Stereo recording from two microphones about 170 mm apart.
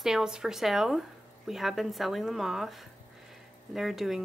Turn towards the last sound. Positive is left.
turn(degrees=0)  # may be behind; listen again after turning